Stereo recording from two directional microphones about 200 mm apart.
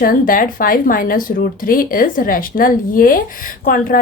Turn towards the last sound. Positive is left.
turn(degrees=45)  # may be behind; listen again after turning